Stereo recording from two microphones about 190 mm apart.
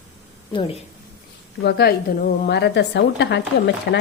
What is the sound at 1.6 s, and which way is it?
A woman's voice, 60° left (ahead or behind).